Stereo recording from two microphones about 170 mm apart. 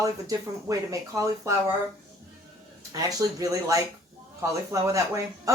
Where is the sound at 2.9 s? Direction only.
20° right (ahead or behind).